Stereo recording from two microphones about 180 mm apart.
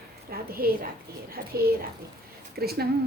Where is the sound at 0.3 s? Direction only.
55° right (ahead or behind).